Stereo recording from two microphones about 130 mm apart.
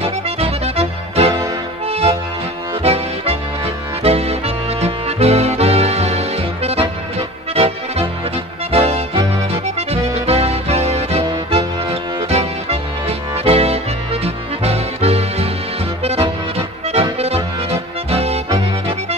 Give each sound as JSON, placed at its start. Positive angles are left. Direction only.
{"t": 0.0, "sound": "music", "side_deg": -50}
{"t": 8.7, "sound": "music", "side_deg": -50}